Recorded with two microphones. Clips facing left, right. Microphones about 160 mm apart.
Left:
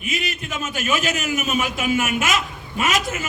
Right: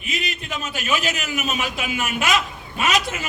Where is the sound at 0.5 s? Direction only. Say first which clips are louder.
Left 1 dB; 45° left (ahead or behind).